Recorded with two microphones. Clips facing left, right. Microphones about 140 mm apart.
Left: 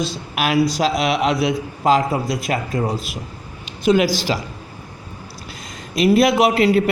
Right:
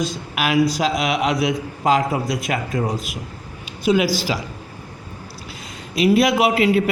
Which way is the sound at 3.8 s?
45° left (ahead or behind).